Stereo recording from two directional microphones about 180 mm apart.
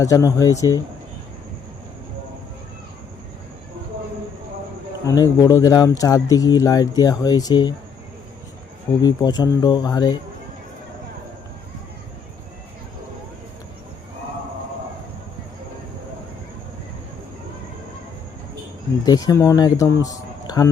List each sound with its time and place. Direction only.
0.0 s speech: 20° left (ahead or behind)
5.0 s speech: 20° left (ahead or behind)
9.0 s speech: 20° left (ahead or behind)
19.0 s speech: 20° left (ahead or behind)